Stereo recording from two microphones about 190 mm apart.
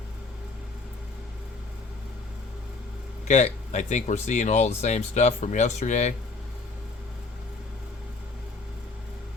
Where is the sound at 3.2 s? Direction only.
40° left (ahead or behind).